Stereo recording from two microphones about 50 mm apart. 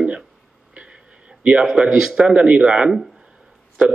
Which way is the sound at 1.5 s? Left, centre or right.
Centre.